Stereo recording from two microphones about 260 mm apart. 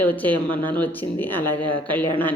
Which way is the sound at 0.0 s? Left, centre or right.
Centre.